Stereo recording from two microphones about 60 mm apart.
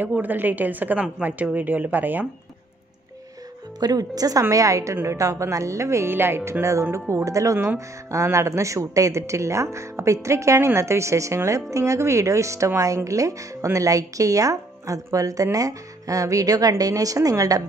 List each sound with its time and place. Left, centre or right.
0.0 s a woman's voice: right
3.8 s a woman's voice: right
6.1 s speech: right
7.5 s speech: right
8.1 s speech: right